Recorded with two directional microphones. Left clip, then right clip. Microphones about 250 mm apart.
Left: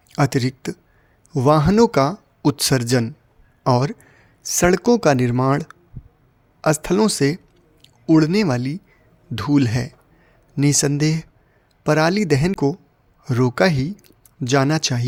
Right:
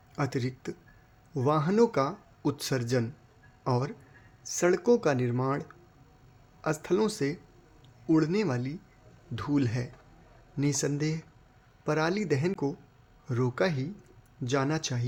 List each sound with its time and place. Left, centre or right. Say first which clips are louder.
0.1 s speech: left 12 dB; left